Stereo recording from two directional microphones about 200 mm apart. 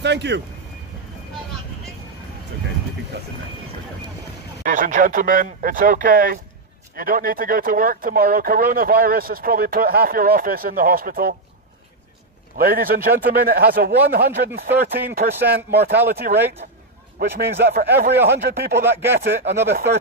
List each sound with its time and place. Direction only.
0.0 s speech: 60° right (ahead or behind)
4.6 s speech: 40° right (ahead or behind)
12.5 s speech: 45° right (ahead or behind)
16.6 s a sound: 45° right (ahead or behind)
17.2 s speech: 50° right (ahead or behind)